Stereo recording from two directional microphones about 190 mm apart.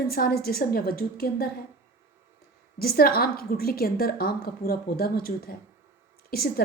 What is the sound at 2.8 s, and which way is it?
A woman's voice, 55° left (ahead or behind).